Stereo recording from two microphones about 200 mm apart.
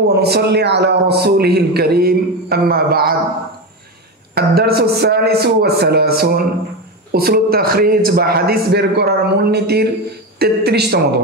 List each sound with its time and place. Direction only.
0.1 s a man's voice: 55° right (ahead or behind)
4.4 s a man's voice: 50° right (ahead or behind)